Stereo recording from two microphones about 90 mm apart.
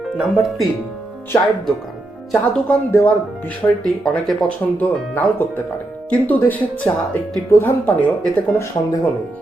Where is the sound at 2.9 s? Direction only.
25° left (ahead or behind).